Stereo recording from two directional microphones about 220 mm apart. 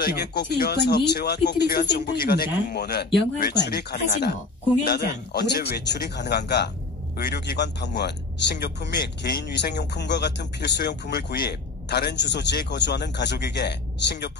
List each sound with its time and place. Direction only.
0.0 s speech: 45° left (ahead or behind)